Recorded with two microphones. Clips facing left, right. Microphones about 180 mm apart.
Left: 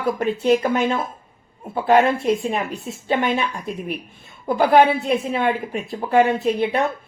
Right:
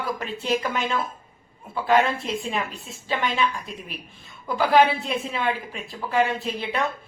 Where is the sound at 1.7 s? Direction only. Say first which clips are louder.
Left 5 dB; 50° left (ahead or behind).